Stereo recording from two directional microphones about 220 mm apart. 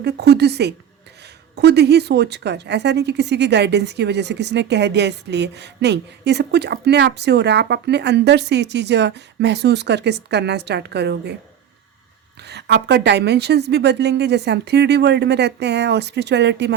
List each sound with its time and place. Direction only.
0.0 s a woman's voice: 50° right (ahead or behind)
12.4 s a woman's voice: 50° right (ahead or behind)